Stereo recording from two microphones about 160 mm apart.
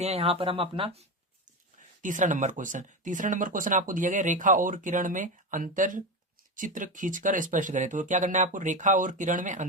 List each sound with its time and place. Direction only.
0.0 s speech: 40° right (ahead or behind)
2.0 s speech: 55° right (ahead or behind)